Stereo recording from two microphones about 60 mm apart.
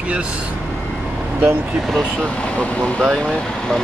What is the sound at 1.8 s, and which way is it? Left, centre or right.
Speech, centre.